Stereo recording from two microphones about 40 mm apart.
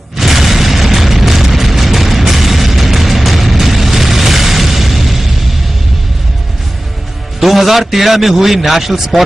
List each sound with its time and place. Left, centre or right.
0.2 s boom: centre
7.3 s a man's voice: centre